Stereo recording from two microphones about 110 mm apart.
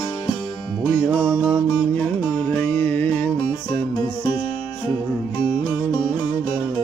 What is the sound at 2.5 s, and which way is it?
Music, 15° left (ahead or behind).